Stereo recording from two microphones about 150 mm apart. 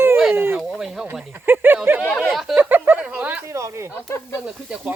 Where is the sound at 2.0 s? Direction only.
10° left (ahead or behind).